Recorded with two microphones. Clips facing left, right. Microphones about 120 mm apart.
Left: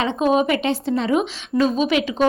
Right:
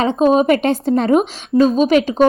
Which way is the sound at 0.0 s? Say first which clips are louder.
Right 5 dB; 40° right (ahead or behind).